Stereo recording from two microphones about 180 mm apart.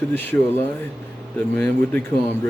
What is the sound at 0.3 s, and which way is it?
Speech, 15° left (ahead or behind).